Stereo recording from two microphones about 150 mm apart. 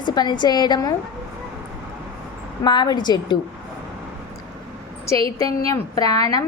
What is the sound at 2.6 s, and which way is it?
Speech, 30° left (ahead or behind).